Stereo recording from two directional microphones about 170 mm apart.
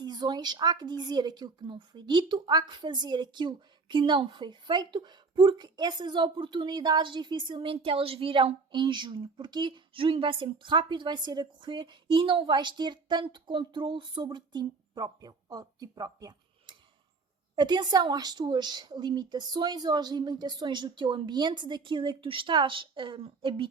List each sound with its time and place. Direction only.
0.0 s a woman's voice: 25° right (ahead or behind)